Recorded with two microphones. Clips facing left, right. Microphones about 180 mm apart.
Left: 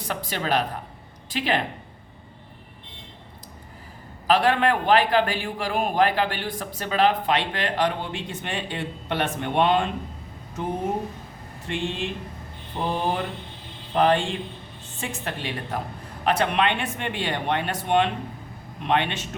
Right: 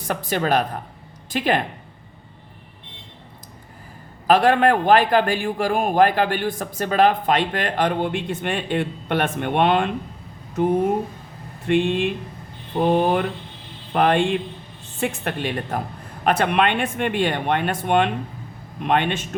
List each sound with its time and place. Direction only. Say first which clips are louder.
0.1 s a man's voice: right 5 dB; 50° right (ahead or behind)
4.3 s a man's voice: right 4 dB; 50° right (ahead or behind)
11.7 s a man's voice: right 9 dB; 60° right (ahead or behind)